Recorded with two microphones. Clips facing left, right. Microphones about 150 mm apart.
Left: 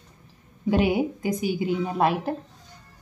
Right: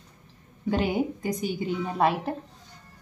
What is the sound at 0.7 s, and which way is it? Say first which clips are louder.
A woman's voice: left 4 dB; 10° left (ahead or behind).